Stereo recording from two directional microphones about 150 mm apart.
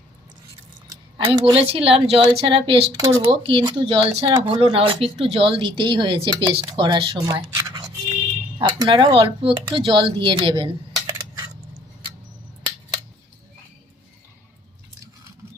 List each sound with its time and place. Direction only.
1.3 s speech: 40° right (ahead or behind)